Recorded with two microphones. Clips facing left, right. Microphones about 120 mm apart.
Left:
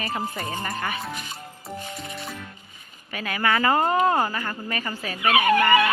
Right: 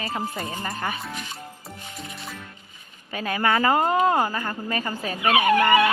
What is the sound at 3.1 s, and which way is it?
Speech, 30° right (ahead or behind).